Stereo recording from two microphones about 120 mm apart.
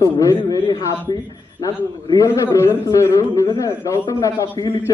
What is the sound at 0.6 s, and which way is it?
Speech, 40° left (ahead or behind).